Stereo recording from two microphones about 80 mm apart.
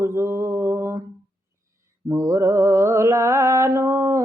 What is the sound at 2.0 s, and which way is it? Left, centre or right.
Mantra, right.